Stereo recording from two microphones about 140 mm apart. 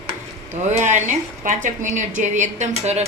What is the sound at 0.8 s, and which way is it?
A woman's voice, 60° right (ahead or behind).